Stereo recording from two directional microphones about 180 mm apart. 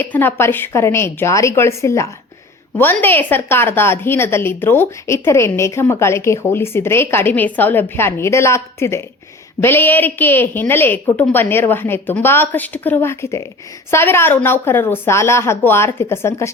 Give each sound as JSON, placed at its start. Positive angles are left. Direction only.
{"t": 0.0, "sound": "a woman's voice", "side_deg": 10}